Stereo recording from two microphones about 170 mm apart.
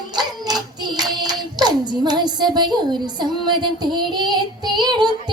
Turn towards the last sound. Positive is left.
turn(degrees=-25)  # may be behind; listen again after turning